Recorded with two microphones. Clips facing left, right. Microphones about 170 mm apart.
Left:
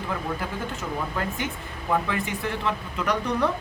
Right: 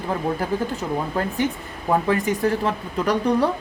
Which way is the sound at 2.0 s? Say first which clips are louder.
Right 8 dB; 40° right (ahead or behind).